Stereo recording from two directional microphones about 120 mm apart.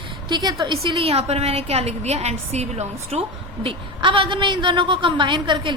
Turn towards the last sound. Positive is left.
turn(degrees=-40)  # may be behind; listen again after turning